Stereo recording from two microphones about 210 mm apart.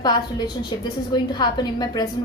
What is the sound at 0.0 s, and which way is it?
A woman's voice, 20° left (ahead or behind).